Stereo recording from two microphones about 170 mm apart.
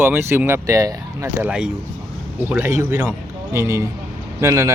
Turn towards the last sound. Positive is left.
turn(degrees=-15)  # may be behind; listen again after turning